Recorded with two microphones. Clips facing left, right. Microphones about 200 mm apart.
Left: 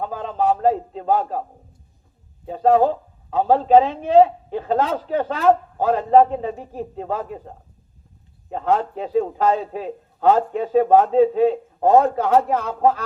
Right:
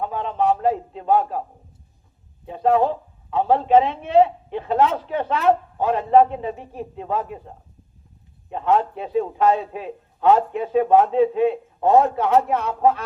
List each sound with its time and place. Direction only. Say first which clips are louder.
0.0 s a woman's voice: even; 40° left (ahead or behind)
2.5 s a woman's voice: left 2 dB; 40° left (ahead or behind)